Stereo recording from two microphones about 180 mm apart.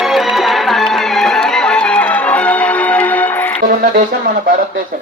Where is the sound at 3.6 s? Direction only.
50° right (ahead or behind).